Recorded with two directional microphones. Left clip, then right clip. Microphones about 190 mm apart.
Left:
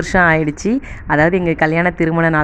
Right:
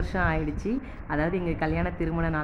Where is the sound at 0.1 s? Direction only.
50° left (ahead or behind).